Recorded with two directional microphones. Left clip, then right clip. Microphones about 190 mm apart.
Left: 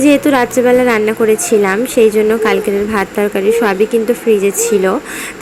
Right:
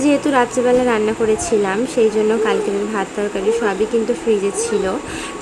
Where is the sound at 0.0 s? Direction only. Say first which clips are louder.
Left 5 dB; 15° left (ahead or behind).